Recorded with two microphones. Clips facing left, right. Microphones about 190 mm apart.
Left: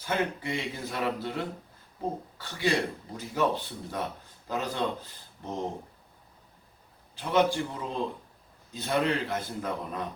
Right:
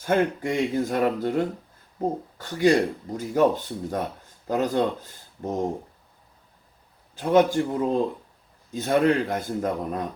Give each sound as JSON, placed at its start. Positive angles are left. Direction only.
{"t": 0.0, "sound": "speech", "side_deg": -50}
{"t": 7.2, "sound": "speech", "side_deg": -45}